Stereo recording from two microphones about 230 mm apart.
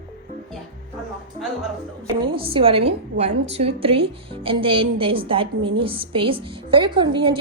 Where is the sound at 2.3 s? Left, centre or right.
Right.